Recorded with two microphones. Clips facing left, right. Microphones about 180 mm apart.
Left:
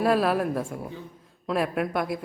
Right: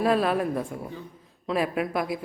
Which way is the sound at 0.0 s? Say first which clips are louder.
Left 1 dB; centre (ahead or behind).